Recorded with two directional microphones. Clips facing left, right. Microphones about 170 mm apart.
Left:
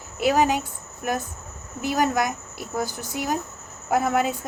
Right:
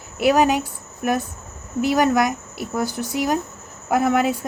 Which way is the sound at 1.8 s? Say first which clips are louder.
Right 5 dB; 75° right (ahead or behind).